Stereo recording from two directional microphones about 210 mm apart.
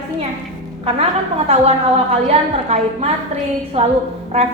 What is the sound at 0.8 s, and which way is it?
A woman's voice, 30° right (ahead or behind).